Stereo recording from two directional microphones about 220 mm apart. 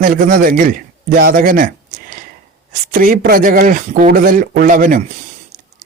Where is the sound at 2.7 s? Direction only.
40° right (ahead or behind).